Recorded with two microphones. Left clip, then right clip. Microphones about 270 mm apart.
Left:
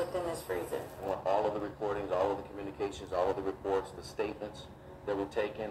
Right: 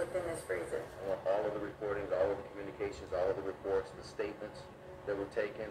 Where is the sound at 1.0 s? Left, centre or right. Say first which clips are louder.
Left 3 dB; left.